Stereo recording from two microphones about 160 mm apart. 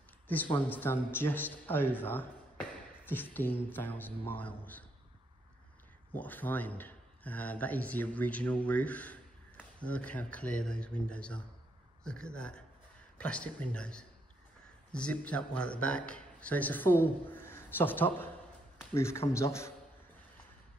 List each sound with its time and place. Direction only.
0.6 s speech: 10° left (ahead or behind)
6.1 s a man's voice: 10° left (ahead or behind)